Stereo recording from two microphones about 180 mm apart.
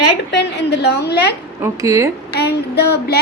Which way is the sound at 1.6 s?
15° right (ahead or behind).